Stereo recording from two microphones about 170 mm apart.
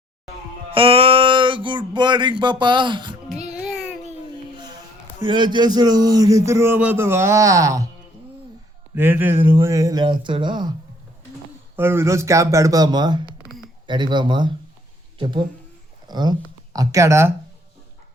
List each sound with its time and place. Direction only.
0.7 s a sound: 35° right (ahead or behind)
3.5 s a sound: 5° right (ahead or behind)
5.2 s speech: 25° right (ahead or behind)
9.0 s speech: 15° right (ahead or behind)
11.8 s speech: 15° right (ahead or behind)
16.0 s speech: 25° right (ahead or behind)